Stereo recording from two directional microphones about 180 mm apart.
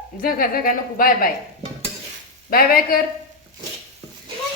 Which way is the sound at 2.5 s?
55° left (ahead or behind).